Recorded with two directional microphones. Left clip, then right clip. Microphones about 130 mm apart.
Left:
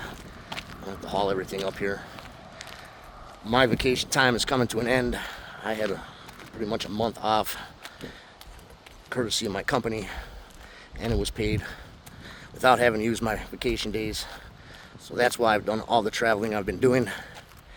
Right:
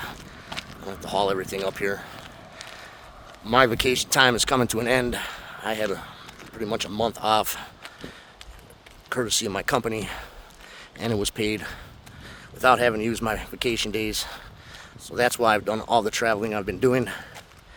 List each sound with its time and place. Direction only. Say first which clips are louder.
0.5 s a sound: right 2 dB; 15° right (ahead or behind)
0.9 s speech: right 3 dB; 40° right (ahead or behind)
3.4 s speech: right 3 dB; 40° right (ahead or behind)
9.0 s speech: right 3 dB; 35° right (ahead or behind)
12.2 s speech: right 1 dB; 20° right (ahead or behind)
13.3 s speech: right 3 dB; 35° right (ahead or behind)
15.1 s speech: right 2 dB; 25° right (ahead or behind)